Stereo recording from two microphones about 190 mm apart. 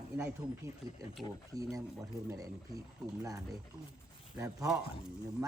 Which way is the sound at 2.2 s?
15° right (ahead or behind).